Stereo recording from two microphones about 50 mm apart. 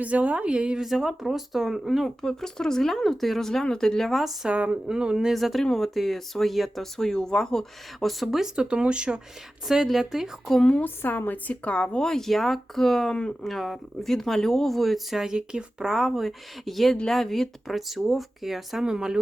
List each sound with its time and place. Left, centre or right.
0.0 s a woman's voice: right
0.8 s speech: centre
2.0 s speech: centre
4.4 s a woman's voice: right
4.9 s speech: centre
8.5 s a woman's voice: centre
9.6 s speech: centre
10.8 s a woman's voice: left
11.6 s speech: left
13.5 s speech: centre
15.2 s speech: centre
15.9 s speech: centre